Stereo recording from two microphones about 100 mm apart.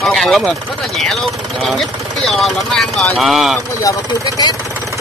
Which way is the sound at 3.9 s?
35° left (ahead or behind).